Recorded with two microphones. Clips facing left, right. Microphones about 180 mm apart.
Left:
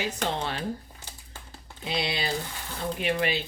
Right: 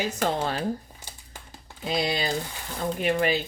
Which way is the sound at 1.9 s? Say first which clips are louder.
Right 3 dB; 45° right (ahead or behind).